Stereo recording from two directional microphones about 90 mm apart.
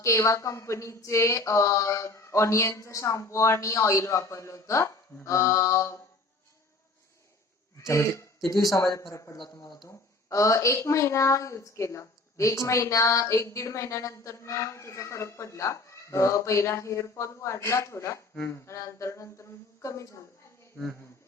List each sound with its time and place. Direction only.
0.0 s a woman's voice: 35° left (ahead or behind)
7.8 s speech: 35° left (ahead or behind)
8.4 s a woman's voice: 45° left (ahead or behind)
9.3 s speech: 55° left (ahead or behind)
10.2 s a woman's voice: 35° left (ahead or behind)
20.8 s speech: 5° left (ahead or behind)